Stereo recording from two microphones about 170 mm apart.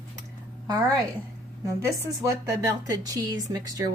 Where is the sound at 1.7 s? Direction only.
20° right (ahead or behind).